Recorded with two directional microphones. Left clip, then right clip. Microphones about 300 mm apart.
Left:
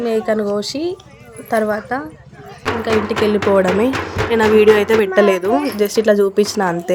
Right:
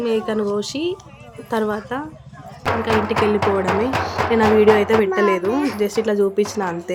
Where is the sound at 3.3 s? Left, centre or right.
Centre.